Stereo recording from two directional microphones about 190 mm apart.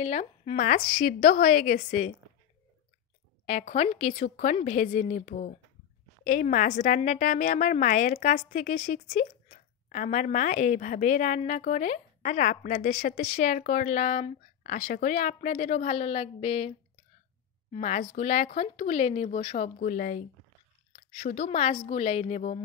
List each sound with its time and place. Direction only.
0.0 s a woman's voice: 35° left (ahead or behind)
3.4 s a woman's voice: 40° left (ahead or behind)
17.7 s a woman's voice: 40° left (ahead or behind)